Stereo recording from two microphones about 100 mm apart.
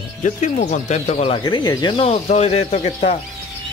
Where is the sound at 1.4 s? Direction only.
45° left (ahead or behind).